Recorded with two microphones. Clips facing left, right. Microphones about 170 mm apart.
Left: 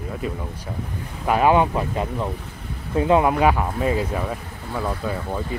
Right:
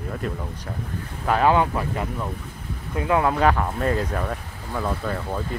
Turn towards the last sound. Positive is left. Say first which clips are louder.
# left 1 dB
turn(degrees=5)  # may be behind; listen again after turning